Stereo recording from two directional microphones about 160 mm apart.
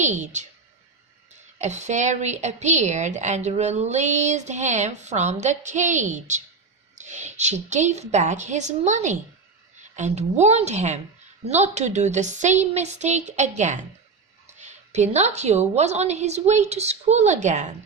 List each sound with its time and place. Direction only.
0.0 s a woman's voice: 50° right (ahead or behind)